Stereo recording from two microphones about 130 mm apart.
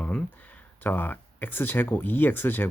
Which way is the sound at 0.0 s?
10° left (ahead or behind).